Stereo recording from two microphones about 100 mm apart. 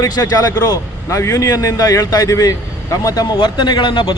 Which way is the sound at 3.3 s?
50° left (ahead or behind).